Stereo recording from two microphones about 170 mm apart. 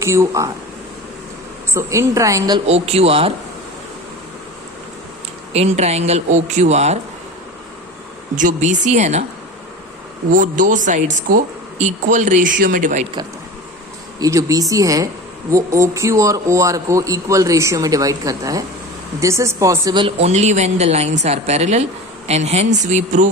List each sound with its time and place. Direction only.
0.0 s a woman's voice: 15° right (ahead or behind)
1.7 s a woman's voice: 15° right (ahead or behind)
2.6 s a woman's voice: 35° right (ahead or behind)
5.5 s a woman's voice: 40° right (ahead or behind)
8.4 s speech: 45° right (ahead or behind)
10.3 s speech: 50° right (ahead or behind)
14.2 s a woman's voice: 20° right (ahead or behind); by 23.3 s 45° right (ahead or behind)